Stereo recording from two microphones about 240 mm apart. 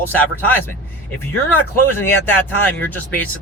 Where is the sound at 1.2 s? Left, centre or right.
Centre.